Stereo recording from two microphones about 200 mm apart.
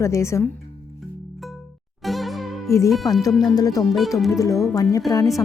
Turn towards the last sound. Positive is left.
turn(degrees=15)  # may be behind; listen again after turning